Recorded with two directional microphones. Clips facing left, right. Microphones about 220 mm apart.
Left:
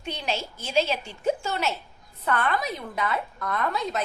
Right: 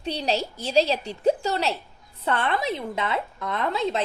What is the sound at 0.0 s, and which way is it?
A woman's voice, 35° right (ahead or behind).